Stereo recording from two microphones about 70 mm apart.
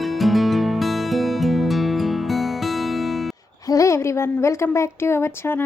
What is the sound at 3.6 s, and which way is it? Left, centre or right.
A woman's voice, left.